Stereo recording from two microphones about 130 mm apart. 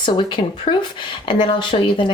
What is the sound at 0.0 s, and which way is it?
Speech, 35° left (ahead or behind).